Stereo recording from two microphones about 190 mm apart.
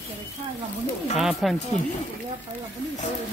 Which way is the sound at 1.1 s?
Centre (ahead or behind).